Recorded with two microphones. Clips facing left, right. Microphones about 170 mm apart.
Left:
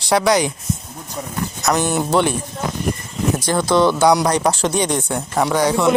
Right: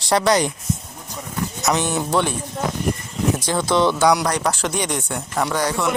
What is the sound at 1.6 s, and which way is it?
Speech, 5° left (ahead or behind).